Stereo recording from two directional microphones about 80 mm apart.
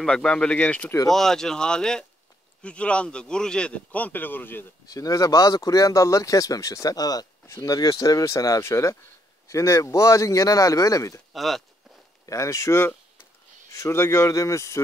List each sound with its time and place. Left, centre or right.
0.0 s speech: centre
1.1 s speech: centre; by 4.6 s left
4.8 s speech: left
7.4 s speech: left
11.3 s speech: centre
12.3 s speech: left